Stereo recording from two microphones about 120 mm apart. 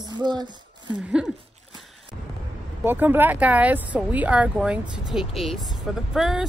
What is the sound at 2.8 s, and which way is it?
Speech, 15° right (ahead or behind).